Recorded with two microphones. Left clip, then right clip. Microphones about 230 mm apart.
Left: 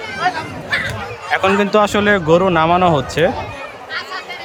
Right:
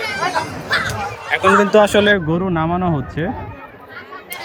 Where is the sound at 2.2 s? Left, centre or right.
Left.